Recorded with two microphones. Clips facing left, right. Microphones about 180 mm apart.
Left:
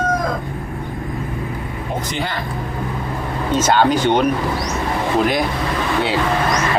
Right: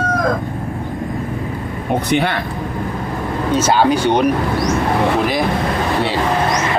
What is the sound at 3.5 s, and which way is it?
Speech, 10° right (ahead or behind).